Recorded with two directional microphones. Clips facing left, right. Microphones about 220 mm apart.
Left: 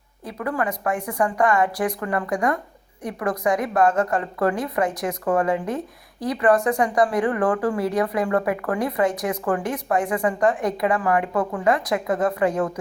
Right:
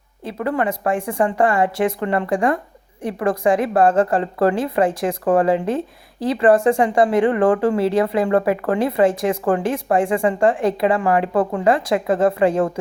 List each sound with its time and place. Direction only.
0.3 s a woman's voice: 25° right (ahead or behind)